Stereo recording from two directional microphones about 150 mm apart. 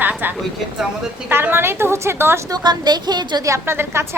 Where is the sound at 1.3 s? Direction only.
15° right (ahead or behind).